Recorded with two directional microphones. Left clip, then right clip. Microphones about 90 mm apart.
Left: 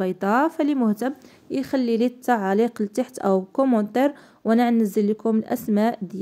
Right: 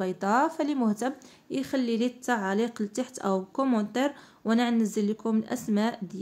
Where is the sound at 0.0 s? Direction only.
40° left (ahead or behind).